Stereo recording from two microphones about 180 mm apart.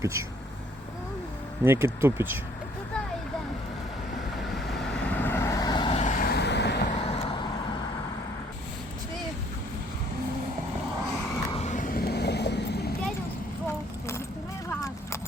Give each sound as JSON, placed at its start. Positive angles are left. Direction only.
{"t": 0.0, "sound": "speech", "side_deg": -15}
{"t": 1.6, "sound": "speech", "side_deg": -15}
{"t": 5.0, "sound": "vehicle", "side_deg": 10}
{"t": 6.0, "sound": "vehicle", "side_deg": 45}
{"t": 6.9, "sound": "vehicle", "side_deg": 35}
{"t": 11.5, "sound": "vehicle", "side_deg": 40}
{"t": 14.7, "sound": "clip-clop", "side_deg": 15}